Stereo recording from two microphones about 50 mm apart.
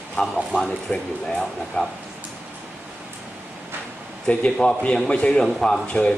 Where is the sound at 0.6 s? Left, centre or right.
Centre.